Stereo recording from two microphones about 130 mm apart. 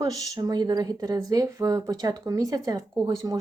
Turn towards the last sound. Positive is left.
turn(degrees=-30)  # may be behind; listen again after turning